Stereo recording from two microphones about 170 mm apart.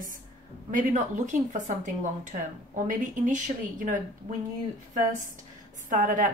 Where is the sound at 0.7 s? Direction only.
50° right (ahead or behind).